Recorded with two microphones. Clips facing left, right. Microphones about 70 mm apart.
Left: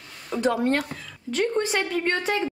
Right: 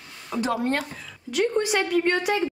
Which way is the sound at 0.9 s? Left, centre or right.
Centre.